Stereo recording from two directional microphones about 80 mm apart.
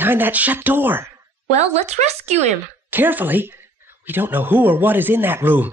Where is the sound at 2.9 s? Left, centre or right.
Right.